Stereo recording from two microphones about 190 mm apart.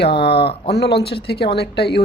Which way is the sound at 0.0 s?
60° left (ahead or behind).